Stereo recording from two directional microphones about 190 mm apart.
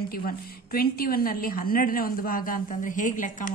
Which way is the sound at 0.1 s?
50° left (ahead or behind).